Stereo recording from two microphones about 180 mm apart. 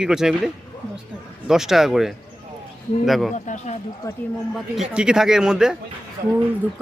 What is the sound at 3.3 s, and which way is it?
Speech, 40° left (ahead or behind).